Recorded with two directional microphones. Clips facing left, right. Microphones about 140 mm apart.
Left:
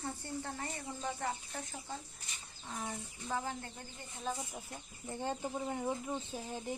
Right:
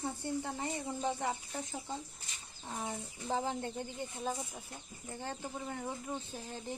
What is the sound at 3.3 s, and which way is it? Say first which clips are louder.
Speech: right 4 dB; 25° right (ahead or behind).